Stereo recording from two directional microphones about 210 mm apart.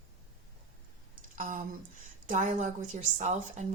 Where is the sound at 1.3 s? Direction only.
35° right (ahead or behind).